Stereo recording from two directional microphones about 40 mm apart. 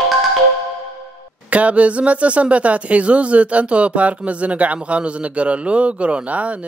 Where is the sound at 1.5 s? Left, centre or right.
Right.